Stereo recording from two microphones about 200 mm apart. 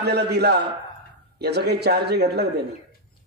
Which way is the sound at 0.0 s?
55° right (ahead or behind).